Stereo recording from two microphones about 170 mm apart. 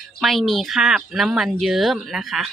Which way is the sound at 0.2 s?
Centre (ahead or behind).